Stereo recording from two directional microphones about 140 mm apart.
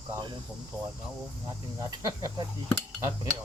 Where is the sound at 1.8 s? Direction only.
25° right (ahead or behind).